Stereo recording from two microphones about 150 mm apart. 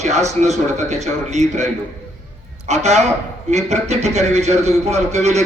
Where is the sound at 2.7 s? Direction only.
50° right (ahead or behind).